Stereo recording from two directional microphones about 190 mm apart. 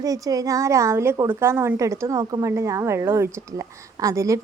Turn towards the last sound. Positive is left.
turn(degrees=-15)  # may be behind; listen again after turning